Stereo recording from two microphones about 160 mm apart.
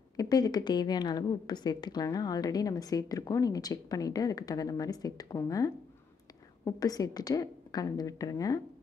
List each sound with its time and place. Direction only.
0.2 s a woman's voice: 25° left (ahead or behind)